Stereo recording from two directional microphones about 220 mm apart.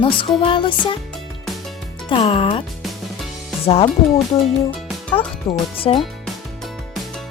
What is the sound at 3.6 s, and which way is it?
Speech, 25° left (ahead or behind).